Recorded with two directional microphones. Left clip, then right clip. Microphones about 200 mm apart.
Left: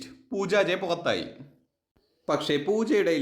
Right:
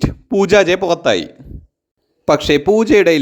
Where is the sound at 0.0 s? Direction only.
40° right (ahead or behind).